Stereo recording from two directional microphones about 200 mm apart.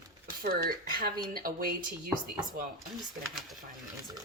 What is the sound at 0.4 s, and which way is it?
Speech, 50° right (ahead or behind).